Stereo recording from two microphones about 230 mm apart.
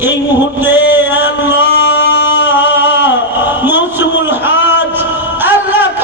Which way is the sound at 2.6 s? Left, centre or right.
Left.